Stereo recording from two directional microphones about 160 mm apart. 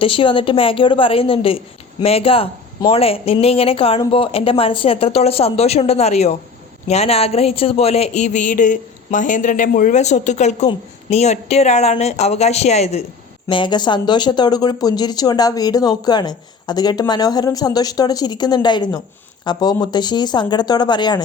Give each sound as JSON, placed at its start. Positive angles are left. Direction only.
{"t": 0.0, "sound": "a woman's voice", "side_deg": 35}
{"t": 13.5, "sound": "speech", "side_deg": 30}